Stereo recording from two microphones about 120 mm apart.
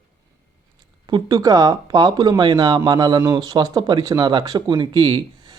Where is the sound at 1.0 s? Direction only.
35° right (ahead or behind).